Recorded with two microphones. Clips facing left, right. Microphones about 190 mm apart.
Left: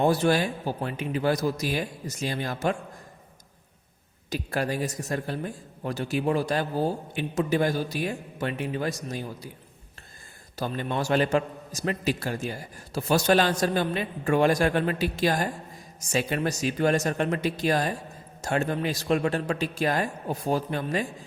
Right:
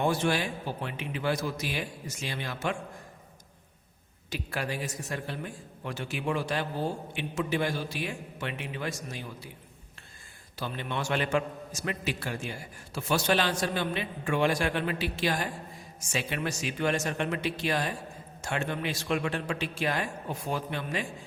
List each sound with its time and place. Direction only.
0.0 s a man's voice: 40° left (ahead or behind)
4.3 s a man's voice: 40° left (ahead or behind)
10.6 s a man's voice: 40° left (ahead or behind)